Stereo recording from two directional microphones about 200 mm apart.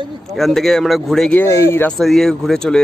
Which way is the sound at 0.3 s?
Centre (ahead or behind).